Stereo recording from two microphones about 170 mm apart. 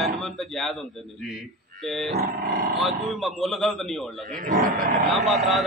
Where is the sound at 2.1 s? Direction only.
55° right (ahead or behind).